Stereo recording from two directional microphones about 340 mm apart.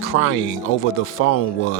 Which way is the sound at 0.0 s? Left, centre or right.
Left.